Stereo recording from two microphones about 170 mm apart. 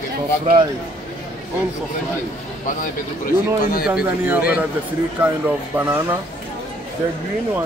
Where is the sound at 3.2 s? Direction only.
55° left (ahead or behind).